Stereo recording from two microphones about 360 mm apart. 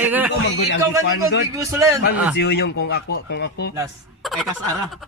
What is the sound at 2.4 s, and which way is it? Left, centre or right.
Speech, left.